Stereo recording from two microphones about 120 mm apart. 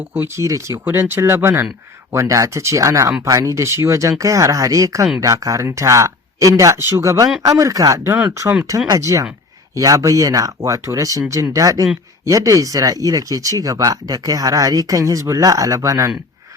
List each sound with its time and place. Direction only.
0.1 s speech: 20° right (ahead or behind)